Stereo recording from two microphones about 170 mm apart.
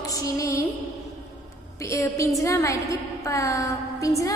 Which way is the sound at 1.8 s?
20° left (ahead or behind).